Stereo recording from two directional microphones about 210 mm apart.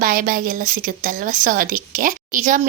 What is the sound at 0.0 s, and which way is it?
Speech, 40° right (ahead or behind).